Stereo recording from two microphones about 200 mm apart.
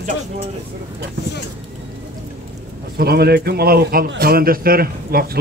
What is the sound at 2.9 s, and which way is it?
A man's voice, 50° right (ahead or behind).